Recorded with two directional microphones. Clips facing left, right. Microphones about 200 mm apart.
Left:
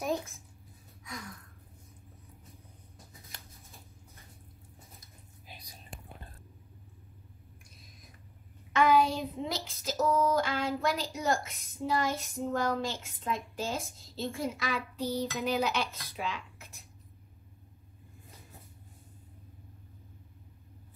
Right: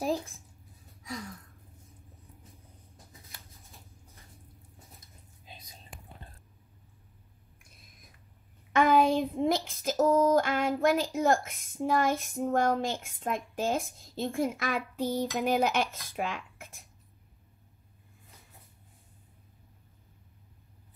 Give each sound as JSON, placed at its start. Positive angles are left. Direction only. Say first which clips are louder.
{"t": 0.0, "sound": "writing", "louder": "right 2 dB", "side_deg": -30}
{"t": 5.5, "sound": "whispering", "louder": "right 1 dB", "side_deg": -20}
{"t": 8.7, "sound": "a sound", "louder": "right 2 dB", "side_deg": -50}